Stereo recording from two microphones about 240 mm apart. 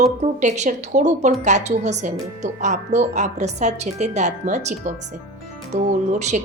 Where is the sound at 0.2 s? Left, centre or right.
Right.